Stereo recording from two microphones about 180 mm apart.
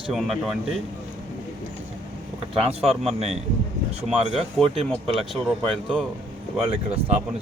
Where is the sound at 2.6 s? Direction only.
35° right (ahead or behind).